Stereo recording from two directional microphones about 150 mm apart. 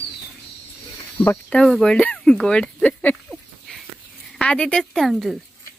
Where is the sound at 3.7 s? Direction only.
5° left (ahead or behind).